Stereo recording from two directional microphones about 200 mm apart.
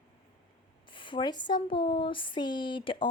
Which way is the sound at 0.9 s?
25° left (ahead or behind).